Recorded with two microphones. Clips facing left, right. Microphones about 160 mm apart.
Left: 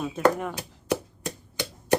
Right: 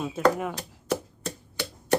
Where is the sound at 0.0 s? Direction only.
5° right (ahead or behind).